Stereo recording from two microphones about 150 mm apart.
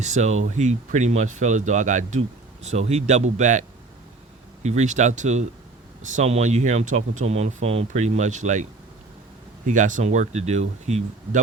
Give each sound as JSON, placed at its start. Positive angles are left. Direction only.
{"t": 0.0, "sound": "speech", "side_deg": -50}
{"t": 9.6, "sound": "speech", "side_deg": -55}